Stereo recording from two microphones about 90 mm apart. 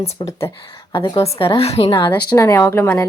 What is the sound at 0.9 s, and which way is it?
Speech, 60° left (ahead or behind).